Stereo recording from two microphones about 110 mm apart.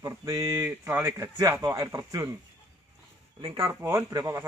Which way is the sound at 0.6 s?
20° right (ahead or behind).